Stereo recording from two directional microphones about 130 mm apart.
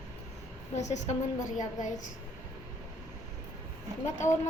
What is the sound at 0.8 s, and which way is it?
Speech, 65° left (ahead or behind).